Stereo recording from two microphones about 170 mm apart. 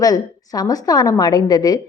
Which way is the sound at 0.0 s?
20° left (ahead or behind).